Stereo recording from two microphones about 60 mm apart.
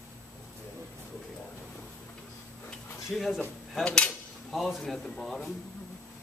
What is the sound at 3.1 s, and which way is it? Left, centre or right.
Speech, centre.